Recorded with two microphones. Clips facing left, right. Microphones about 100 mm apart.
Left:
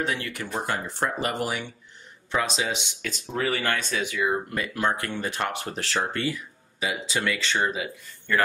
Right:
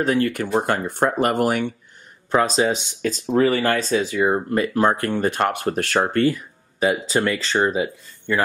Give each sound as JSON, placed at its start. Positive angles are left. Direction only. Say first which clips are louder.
{"t": 0.0, "sound": "speech", "louder": "right 9 dB", "side_deg": -45}
{"t": 2.3, "sound": "speech", "louder": "right 8 dB", "side_deg": -40}